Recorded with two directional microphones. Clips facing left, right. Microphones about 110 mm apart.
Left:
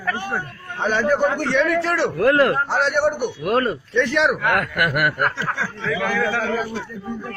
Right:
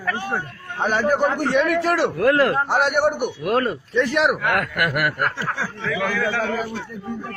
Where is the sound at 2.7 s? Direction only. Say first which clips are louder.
Even; 15° right (ahead or behind); by 5.2 s 10° left (ahead or behind).